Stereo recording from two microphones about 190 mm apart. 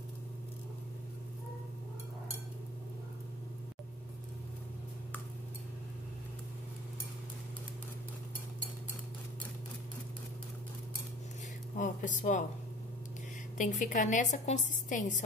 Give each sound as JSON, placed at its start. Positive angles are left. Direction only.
{"t": 11.7, "sound": "a woman's voice", "side_deg": 40}
{"t": 13.6, "sound": "a woman's voice", "side_deg": 40}